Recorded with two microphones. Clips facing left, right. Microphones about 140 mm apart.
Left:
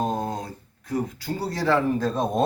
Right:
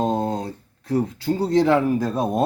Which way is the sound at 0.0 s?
25° right (ahead or behind).